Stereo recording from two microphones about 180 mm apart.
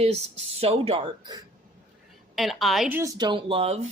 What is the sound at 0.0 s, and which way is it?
A woman's voice, 35° right (ahead or behind).